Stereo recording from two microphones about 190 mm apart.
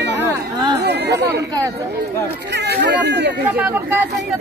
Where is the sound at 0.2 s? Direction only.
20° right (ahead or behind).